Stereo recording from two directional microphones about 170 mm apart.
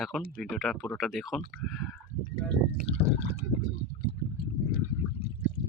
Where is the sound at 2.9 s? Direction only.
35° left (ahead or behind).